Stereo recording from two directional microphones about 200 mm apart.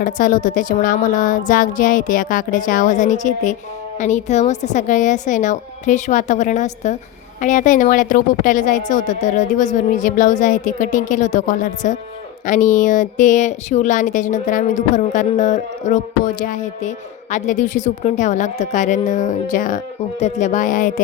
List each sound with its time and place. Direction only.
0.0 s speech: 40° left (ahead or behind)